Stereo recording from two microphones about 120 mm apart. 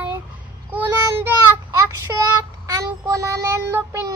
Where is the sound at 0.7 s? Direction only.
20° right (ahead or behind).